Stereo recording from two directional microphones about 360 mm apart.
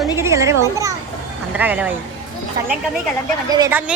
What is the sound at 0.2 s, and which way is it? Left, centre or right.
A woman's voice, centre.